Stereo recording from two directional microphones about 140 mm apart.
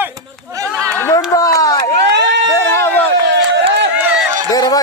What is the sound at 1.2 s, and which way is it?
Speech, 25° left (ahead or behind).